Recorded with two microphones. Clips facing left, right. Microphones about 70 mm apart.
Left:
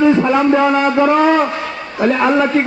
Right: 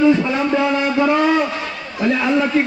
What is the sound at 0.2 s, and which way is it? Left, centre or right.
A man's voice, left.